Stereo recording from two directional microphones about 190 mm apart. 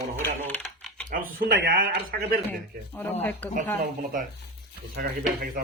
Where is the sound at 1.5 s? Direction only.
65° right (ahead or behind).